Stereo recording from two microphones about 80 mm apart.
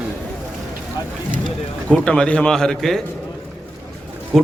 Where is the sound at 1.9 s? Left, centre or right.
Centre.